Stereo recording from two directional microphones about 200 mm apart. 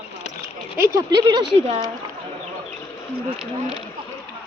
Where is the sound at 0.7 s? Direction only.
20° right (ahead or behind).